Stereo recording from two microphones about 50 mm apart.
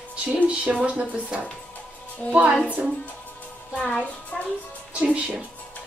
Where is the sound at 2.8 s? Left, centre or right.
Right.